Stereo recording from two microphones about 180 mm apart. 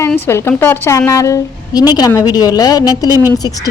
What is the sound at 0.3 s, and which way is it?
A woman's voice, 15° left (ahead or behind).